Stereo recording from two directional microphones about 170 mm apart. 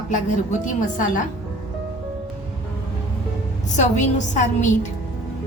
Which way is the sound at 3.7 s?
45° left (ahead or behind).